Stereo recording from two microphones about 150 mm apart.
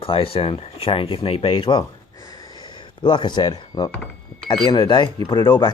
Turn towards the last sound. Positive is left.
turn(degrees=30)  # may be behind; listen again after turning